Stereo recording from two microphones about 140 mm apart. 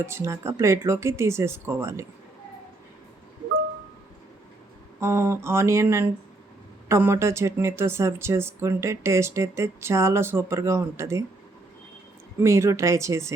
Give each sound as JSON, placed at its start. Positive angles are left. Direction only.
{"t": 0.0, "sound": "speech", "side_deg": -20}
{"t": 4.9, "sound": "speech", "side_deg": -20}
{"t": 12.4, "sound": "speech", "side_deg": -20}